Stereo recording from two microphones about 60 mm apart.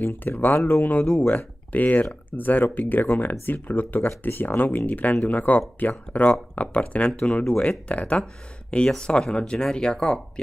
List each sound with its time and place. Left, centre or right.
0.0 s speech: left; by 10.4 s centre